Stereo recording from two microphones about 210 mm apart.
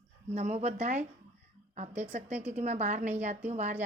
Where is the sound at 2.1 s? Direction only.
30° right (ahead or behind).